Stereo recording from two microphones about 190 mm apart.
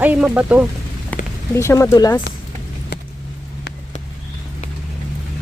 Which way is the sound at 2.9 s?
60° left (ahead or behind).